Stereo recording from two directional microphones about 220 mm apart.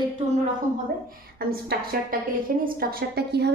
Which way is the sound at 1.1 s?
45° right (ahead or behind).